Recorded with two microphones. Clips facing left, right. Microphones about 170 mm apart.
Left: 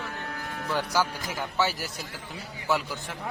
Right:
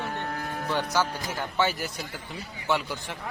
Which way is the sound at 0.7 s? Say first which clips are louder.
Even; 10° left (ahead or behind).